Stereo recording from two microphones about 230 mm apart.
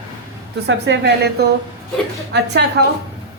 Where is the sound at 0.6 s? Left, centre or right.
Right.